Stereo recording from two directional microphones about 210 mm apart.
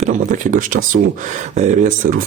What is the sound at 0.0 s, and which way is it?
Speech, 40° right (ahead or behind).